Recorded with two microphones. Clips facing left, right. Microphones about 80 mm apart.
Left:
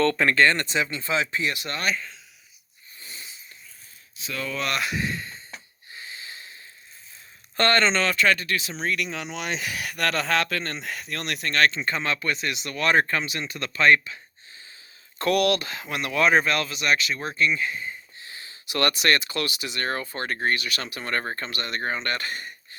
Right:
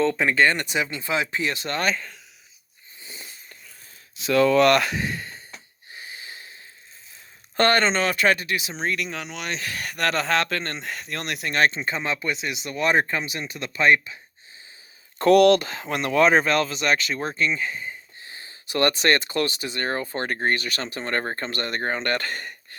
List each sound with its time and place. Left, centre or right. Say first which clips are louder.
0.0 s speech: even; centre; by 2.0 s right
3.0 s a sound: right 1 dB; right
4.1 s speech: right 14 dB; right
4.9 s speech: even; right
5.9 s wheeze: right 1 dB; right
7.5 s speech: right 2 dB; right
8.7 s speech: right 1 dB; centre
11.5 s speech: even; centre
15.2 s speech: right 7 dB; right